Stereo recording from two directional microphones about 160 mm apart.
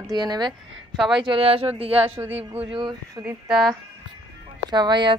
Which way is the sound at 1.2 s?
35° right (ahead or behind).